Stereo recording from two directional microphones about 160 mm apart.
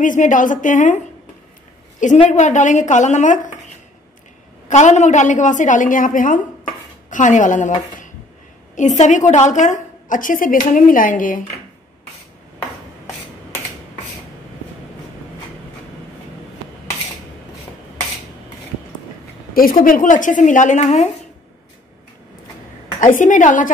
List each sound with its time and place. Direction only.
0.0 s a woman's voice: 55° left (ahead or behind)
8.7 s a woman's voice: 50° left (ahead or behind)
19.5 s speech: 60° left (ahead or behind); by 21.1 s 45° left (ahead or behind)
23.1 s speech: 50° left (ahead or behind)